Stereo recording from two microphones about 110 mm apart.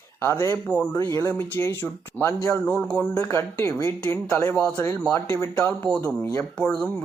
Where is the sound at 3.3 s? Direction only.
25° left (ahead or behind).